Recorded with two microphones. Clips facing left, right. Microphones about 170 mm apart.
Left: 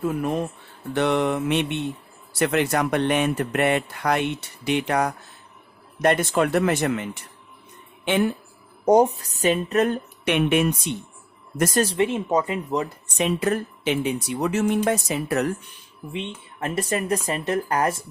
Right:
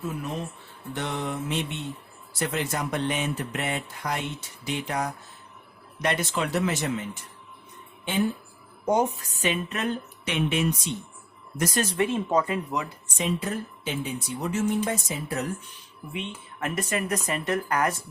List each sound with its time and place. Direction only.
0.0 s speech: 55° left (ahead or behind)
0.9 s speech: 70° left (ahead or behind)
6.0 s speech: 50° left (ahead or behind); by 8.3 s 75° left (ahead or behind)
8.8 s speech: 40° left (ahead or behind); by 11.8 s 55° left (ahead or behind)
11.9 s speech: 20° left (ahead or behind)
13.1 s speech: 70° left (ahead or behind)
16.1 s speech: 30° left (ahead or behind)